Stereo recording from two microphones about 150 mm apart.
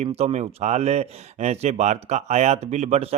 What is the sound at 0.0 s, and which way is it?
Speech, 45° right (ahead or behind).